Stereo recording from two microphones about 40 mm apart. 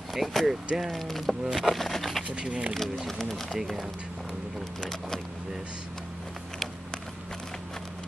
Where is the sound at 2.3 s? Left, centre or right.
Right.